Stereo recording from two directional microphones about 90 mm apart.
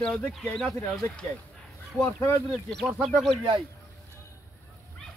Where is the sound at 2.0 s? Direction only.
35° left (ahead or behind).